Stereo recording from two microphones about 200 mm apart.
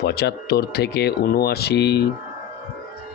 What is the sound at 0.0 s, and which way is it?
Speech, 55° left (ahead or behind).